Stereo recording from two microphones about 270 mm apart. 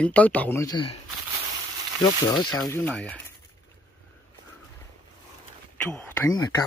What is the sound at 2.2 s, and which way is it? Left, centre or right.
Speech, centre.